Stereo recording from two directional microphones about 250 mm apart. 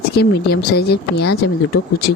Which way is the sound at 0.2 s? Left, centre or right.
Left.